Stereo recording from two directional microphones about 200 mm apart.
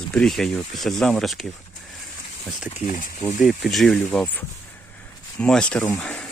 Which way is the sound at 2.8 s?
40° left (ahead or behind).